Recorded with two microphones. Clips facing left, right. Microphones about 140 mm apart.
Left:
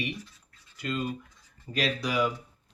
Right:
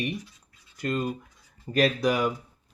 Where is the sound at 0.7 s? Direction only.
45° right (ahead or behind).